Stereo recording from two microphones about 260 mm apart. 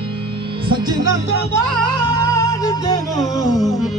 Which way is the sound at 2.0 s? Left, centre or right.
Centre.